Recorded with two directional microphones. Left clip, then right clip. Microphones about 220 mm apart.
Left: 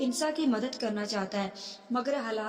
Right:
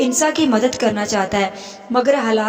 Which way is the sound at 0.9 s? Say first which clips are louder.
Right 14 dB; 40° right (ahead or behind).